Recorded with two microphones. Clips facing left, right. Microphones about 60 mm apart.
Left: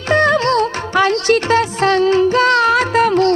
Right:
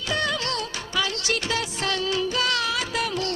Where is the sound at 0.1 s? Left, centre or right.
Left.